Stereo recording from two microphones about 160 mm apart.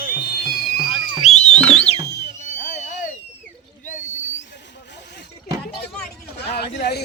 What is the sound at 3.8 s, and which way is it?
Owl, 50° left (ahead or behind).